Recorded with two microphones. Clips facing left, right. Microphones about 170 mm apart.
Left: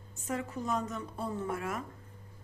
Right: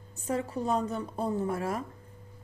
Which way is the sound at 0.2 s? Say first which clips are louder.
Right 5 dB; 35° right (ahead or behind).